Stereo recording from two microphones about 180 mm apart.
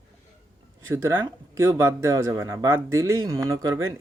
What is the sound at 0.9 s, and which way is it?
Speech, 15° right (ahead or behind).